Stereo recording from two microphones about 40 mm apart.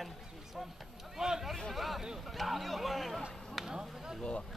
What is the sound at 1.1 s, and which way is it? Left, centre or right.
Speech, centre.